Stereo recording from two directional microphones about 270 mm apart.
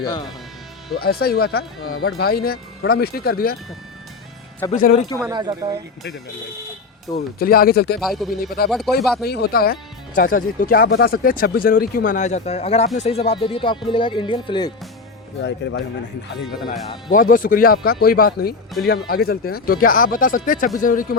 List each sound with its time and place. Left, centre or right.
0.9 s speech: left
4.7 s speech: left
5.2 s speech: centre
7.2 s speech: left
7.9 s speech: centre
8.6 s speech: left
9.0 s speech: centre
9.2 s speech: left; by 14.7 s centre
15.4 s speech: left
17.1 s speech: left